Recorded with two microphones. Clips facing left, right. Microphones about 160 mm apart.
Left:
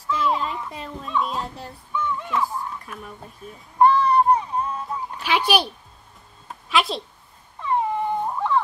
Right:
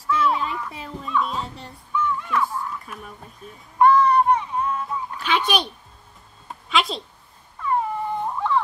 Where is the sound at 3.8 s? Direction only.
30° left (ahead or behind).